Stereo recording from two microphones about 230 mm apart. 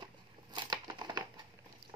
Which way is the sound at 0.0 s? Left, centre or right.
Centre.